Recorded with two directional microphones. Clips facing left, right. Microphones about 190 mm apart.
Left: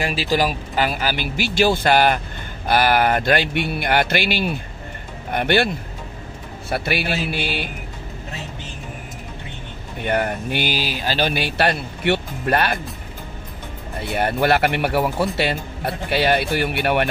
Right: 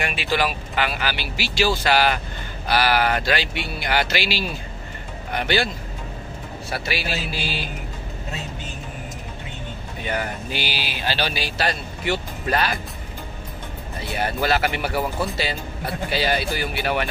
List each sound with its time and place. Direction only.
0.0 s speech: 35° left (ahead or behind); by 5.7 s 55° left (ahead or behind)
6.7 s speech: 55° left (ahead or behind)
10.0 s speech: 55° left (ahead or behind)
13.9 s speech: 55° left (ahead or behind)